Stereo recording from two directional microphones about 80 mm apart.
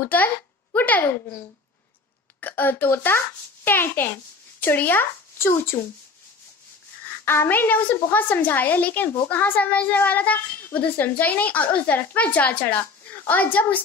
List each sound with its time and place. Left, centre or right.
0.0 s a child's voice: left
2.4 s a child's voice: left
7.1 s a child's voice: left